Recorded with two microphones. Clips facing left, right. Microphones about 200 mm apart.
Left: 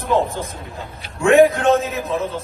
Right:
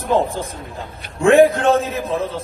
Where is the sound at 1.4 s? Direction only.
30° right (ahead or behind).